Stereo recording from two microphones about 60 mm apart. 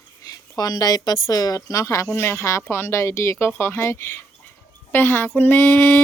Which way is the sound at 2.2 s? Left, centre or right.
Left.